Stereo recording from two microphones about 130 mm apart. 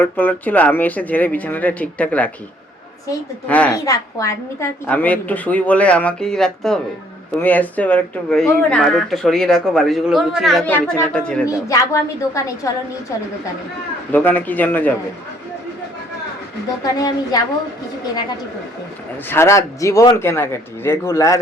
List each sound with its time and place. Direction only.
0.0 s speech: 15° left (ahead or behind)
3.4 s speech: 10° left (ahead or behind)
3.7 s speech: 25° left (ahead or behind)
4.9 s speech: 10° left (ahead or behind)
10.7 s speech: 15° left (ahead or behind)
11.4 s speech: 25° left (ahead or behind)
14.1 s speech: 15° left (ahead or behind)
16.8 s speech: 30° left (ahead or behind)
19.3 s speech: 20° left (ahead or behind)